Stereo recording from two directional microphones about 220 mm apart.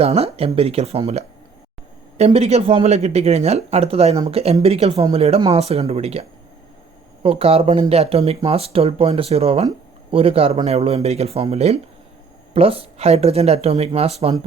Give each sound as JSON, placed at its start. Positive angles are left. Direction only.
{"t": 0.0, "sound": "speech", "side_deg": -25}